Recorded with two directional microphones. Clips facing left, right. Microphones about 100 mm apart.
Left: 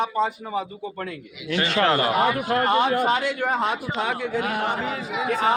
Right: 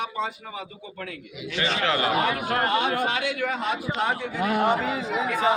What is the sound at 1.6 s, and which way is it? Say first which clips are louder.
A man's voice: left 3 dB; 45° left (ahead or behind).